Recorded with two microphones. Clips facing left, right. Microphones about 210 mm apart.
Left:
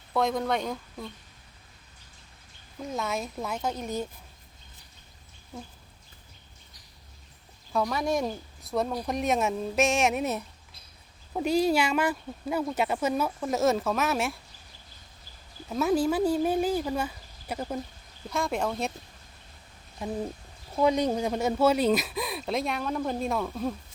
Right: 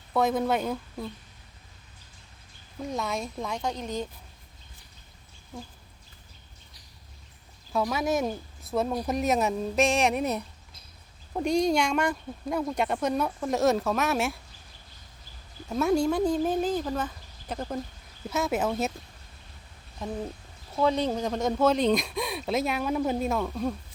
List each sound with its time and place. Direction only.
0.1 s speech: centre (ahead or behind)
2.9 s speech: centre (ahead or behind)
7.7 s speech: 5° right (ahead or behind)
15.7 s speech: centre (ahead or behind)
18.3 s speech: 5° right (ahead or behind)
20.7 s speech: 15° left (ahead or behind)